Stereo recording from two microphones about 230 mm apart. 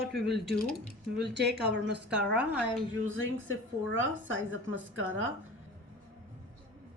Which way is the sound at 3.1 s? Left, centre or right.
Right.